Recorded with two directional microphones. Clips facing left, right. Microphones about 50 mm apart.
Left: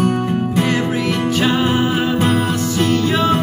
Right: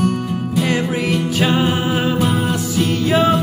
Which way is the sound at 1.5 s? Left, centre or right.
Centre.